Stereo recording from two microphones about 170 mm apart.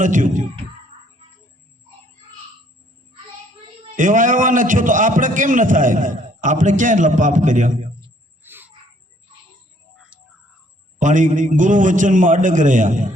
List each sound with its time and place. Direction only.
0.0 s a man's voice: 50° right (ahead or behind)
3.9 s a man's voice: 50° right (ahead or behind)
8.4 s a sound: 10° right (ahead or behind)
11.0 s a man's voice: 50° right (ahead or behind)